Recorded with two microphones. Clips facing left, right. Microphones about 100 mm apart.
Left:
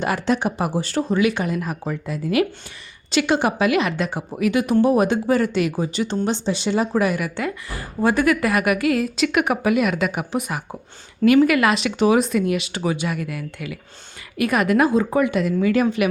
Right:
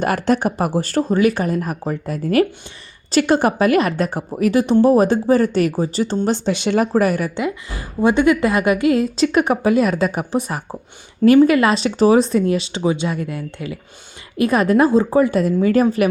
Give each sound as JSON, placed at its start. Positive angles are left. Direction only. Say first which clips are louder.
{"t": 0.0, "sound": "speech", "louder": "right 3 dB", "side_deg": -50}
{"t": 4.6, "sound": "a woman's voice", "louder": "right 4 dB", "side_deg": -30}
{"t": 6.5, "sound": "speech", "louder": "right 4 dB", "side_deg": -65}
{"t": 6.9, "sound": "speech", "louder": "right 4 dB", "side_deg": -40}
{"t": 7.3, "sound": "a woman's voice", "louder": "right 3 dB", "side_deg": -20}